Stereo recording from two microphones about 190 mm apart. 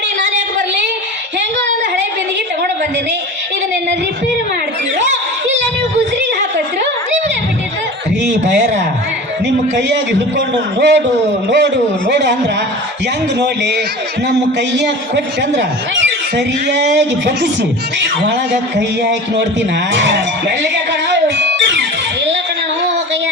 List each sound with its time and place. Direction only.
9.7 s a man's voice: 65° right (ahead or behind)
13.4 s a man's voice: 60° right (ahead or behind)
18.8 s a man's voice: 65° right (ahead or behind)
21.1 s music: 65° right (ahead or behind)